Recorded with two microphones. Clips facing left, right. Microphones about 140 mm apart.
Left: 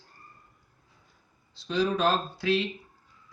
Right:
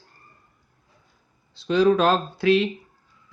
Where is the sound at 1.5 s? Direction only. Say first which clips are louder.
Right 9 dB; 65° right (ahead or behind).